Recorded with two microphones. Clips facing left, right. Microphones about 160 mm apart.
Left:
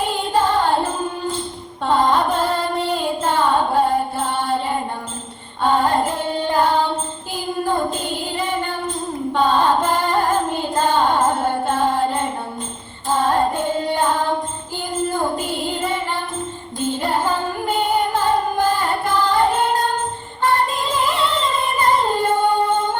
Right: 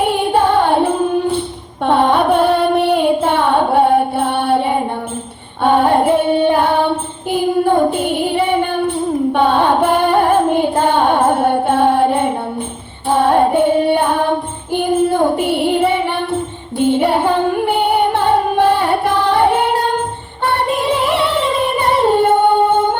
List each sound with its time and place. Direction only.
0.0 s music: 65° right (ahead or behind)
5.6 s child singing: 65° right (ahead or behind)
13.1 s music: 65° right (ahead or behind)
20.4 s singing: 70° right (ahead or behind)